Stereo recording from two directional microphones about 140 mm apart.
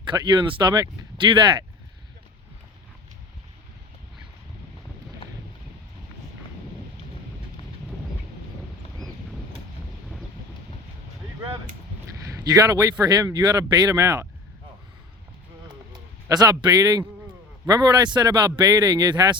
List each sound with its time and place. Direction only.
0.0 s speech: 35° right (ahead or behind)
12.2 s a man's voice: 20° right (ahead or behind)
15.9 s a man's voice: 30° right (ahead or behind)